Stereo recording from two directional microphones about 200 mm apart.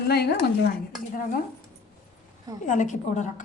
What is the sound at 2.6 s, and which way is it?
Speech, 40° left (ahead or behind).